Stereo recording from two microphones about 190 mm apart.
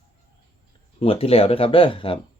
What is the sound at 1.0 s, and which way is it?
Speech, 30° left (ahead or behind).